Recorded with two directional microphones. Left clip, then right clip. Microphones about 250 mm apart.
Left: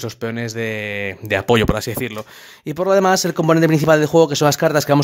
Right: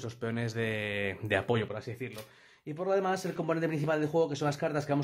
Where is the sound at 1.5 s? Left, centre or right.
Left.